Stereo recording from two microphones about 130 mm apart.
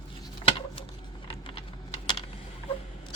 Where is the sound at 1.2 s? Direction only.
45° left (ahead or behind).